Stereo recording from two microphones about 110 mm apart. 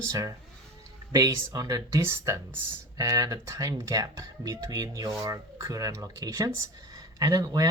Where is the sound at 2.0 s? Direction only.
25° right (ahead or behind).